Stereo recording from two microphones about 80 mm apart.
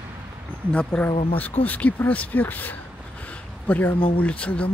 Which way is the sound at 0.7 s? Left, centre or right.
Centre.